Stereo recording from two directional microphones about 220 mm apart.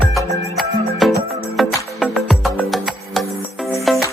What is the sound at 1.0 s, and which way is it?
Music, centre (ahead or behind).